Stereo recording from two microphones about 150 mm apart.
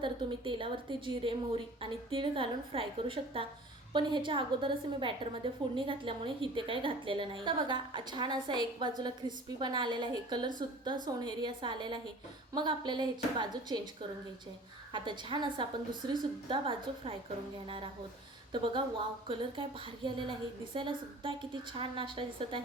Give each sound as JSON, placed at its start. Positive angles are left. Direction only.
{"t": 0.0, "sound": "a woman's voice", "side_deg": -35}
{"t": 14.9, "sound": "a woman's voice", "side_deg": -30}
{"t": 18.5, "sound": "a woman's voice", "side_deg": -30}